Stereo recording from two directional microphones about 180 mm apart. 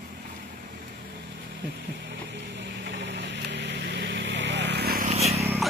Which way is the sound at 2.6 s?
90° right.